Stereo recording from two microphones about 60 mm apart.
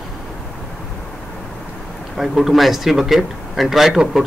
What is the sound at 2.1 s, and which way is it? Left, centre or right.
A man's voice, centre.